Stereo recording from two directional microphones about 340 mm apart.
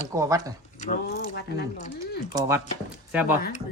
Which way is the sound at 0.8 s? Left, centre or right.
Left.